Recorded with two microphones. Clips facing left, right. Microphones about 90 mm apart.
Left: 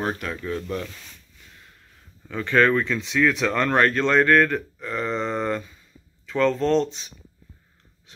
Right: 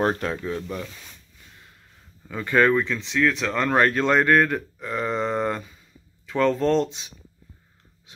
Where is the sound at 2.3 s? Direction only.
10° right (ahead or behind).